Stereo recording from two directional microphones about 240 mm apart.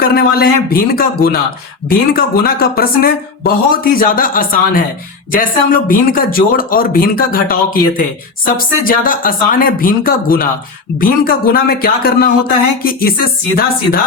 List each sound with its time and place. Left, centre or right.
0.0 s speech: left